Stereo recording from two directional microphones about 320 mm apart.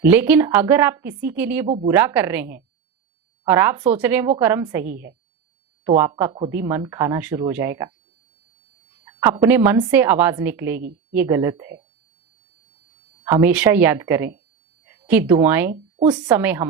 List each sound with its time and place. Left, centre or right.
0.0 s a woman's voice: centre
9.0 s a woman's voice: centre
13.2 s a woman's voice: centre
15.7 s a woman's voice: centre